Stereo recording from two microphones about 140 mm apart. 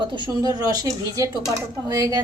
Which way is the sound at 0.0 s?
35° right (ahead or behind).